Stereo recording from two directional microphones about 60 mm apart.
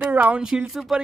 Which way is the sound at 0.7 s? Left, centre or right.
Centre.